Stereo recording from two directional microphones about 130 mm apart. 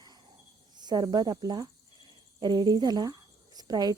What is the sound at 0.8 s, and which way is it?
Speech, 30° right (ahead or behind).